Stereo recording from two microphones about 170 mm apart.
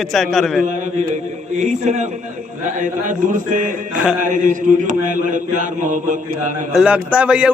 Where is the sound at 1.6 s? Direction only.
45° right (ahead or behind).